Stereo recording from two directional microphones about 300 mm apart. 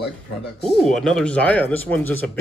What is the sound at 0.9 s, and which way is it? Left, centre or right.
A man's voice, centre.